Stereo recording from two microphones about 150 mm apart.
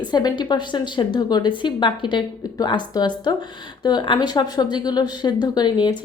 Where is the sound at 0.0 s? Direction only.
30° left (ahead or behind).